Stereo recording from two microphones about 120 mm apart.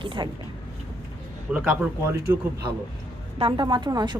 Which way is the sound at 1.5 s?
10° right (ahead or behind).